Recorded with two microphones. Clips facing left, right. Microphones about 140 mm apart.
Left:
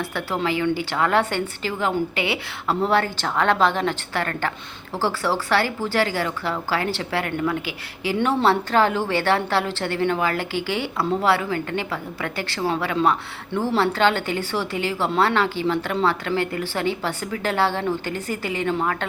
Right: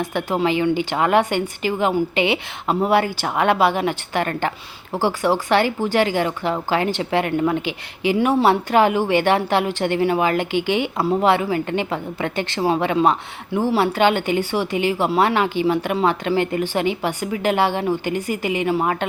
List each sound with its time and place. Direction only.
0.0 s a woman's voice: 15° right (ahead or behind)
8.2 s a woman's voice: 10° right (ahead or behind)